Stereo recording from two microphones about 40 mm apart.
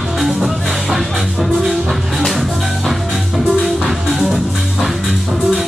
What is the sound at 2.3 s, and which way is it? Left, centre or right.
Music, centre.